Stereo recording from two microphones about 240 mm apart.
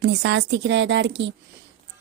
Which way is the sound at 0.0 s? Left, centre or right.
Right.